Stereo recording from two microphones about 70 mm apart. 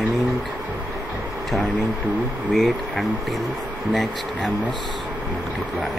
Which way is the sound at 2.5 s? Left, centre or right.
Centre.